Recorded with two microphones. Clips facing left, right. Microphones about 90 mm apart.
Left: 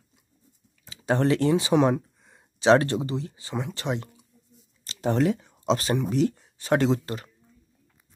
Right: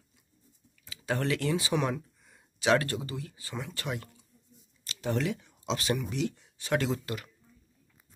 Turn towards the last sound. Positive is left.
turn(degrees=30)  # may be behind; listen again after turning